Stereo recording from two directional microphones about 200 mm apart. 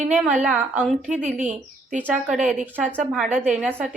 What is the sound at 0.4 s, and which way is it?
A woman's voice, 5° right (ahead or behind).